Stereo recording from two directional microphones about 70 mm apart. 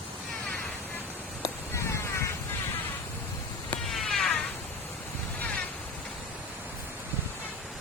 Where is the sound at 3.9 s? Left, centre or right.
Centre.